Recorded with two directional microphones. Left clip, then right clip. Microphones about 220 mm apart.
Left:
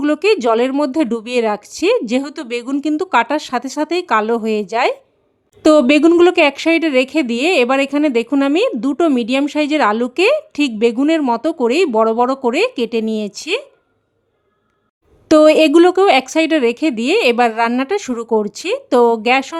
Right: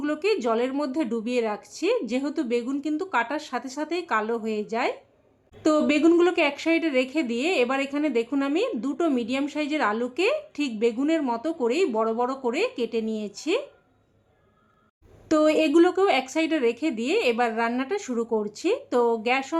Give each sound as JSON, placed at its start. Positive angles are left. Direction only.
{"t": 0.0, "sound": "speech", "side_deg": 50}
{"t": 15.3, "sound": "speech", "side_deg": 50}